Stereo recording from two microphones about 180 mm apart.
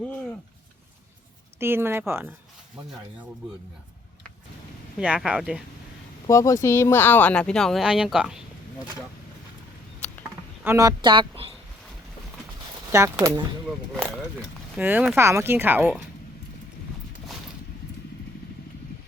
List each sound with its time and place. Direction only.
1.5 s speech: 15° right (ahead or behind)
4.9 s speech: 5° right (ahead or behind)
6.2 s speech: 15° left (ahead or behind); by 8.4 s 5° right (ahead or behind)
10.6 s speech: 15° right (ahead or behind)
12.9 s speech: 15° right (ahead or behind)
14.8 s speech: 10° right (ahead or behind)